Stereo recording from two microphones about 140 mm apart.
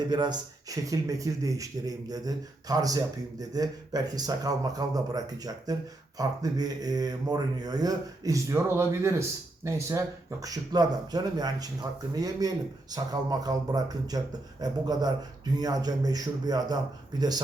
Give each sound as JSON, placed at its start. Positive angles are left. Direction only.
{"t": 0.1, "sound": "a man's voice", "side_deg": -30}